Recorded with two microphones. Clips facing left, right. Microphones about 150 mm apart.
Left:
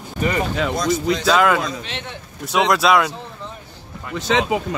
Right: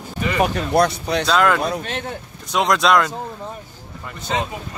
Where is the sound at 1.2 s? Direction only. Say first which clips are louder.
Left 1 dB; 5° left (ahead or behind).